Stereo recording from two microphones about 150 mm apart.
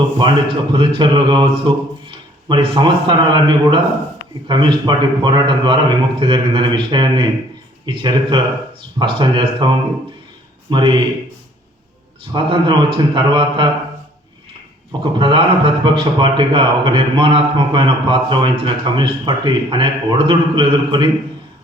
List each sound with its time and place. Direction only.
0.2 s a man's voice: 30° right (ahead or behind)
12.3 s a man's voice: 30° right (ahead or behind)
15.2 s a man's voice: 35° right (ahead or behind)